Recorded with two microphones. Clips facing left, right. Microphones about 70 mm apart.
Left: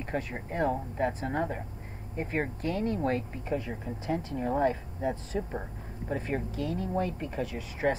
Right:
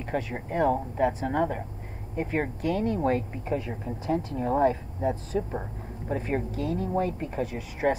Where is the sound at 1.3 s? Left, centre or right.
Centre.